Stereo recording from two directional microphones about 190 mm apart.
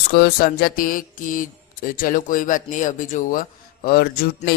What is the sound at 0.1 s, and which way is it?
Speech, 55° left (ahead or behind).